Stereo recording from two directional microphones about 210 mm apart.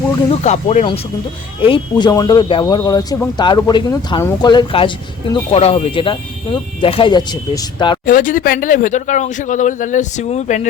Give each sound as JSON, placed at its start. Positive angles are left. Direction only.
{"t": 0.3, "sound": "speech", "side_deg": 35}
{"t": 8.0, "sound": "speech", "side_deg": 40}